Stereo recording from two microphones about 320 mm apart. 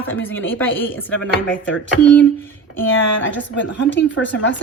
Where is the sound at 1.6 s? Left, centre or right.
Left.